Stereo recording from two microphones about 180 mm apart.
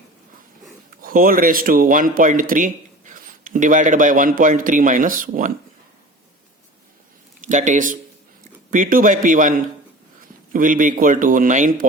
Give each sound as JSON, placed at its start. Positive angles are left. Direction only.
{"t": 1.0, "sound": "speech", "side_deg": -50}
{"t": 7.4, "sound": "speech", "side_deg": -45}